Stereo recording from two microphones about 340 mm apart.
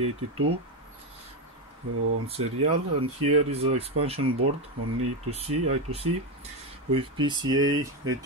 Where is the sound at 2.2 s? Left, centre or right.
Centre.